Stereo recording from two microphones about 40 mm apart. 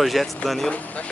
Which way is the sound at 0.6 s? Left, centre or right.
Left.